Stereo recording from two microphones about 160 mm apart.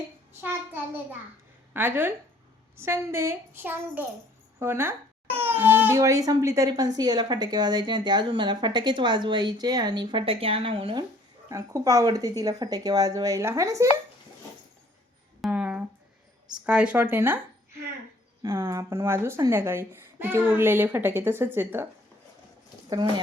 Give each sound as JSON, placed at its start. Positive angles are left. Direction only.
{"t": 0.3, "sound": "a woman's voice", "side_deg": -15}
{"t": 11.4, "sound": "speech", "side_deg": -20}
{"t": 15.4, "sound": "a sound", "side_deg": -5}
{"t": 16.6, "sound": "a woman's voice", "side_deg": -5}
{"t": 18.4, "sound": "a woman's voice", "side_deg": -15}
{"t": 22.9, "sound": "speech", "side_deg": -30}